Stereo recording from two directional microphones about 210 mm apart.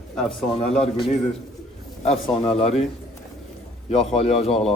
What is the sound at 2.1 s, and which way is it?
Speech, 30° left (ahead or behind).